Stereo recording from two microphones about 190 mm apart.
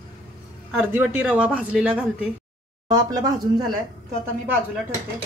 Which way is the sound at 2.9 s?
20° right (ahead or behind).